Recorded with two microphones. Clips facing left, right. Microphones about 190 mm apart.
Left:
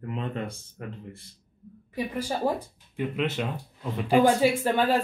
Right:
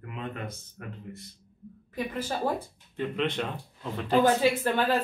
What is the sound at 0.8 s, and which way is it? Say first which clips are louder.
Speech: left 4 dB; 30° left (ahead or behind).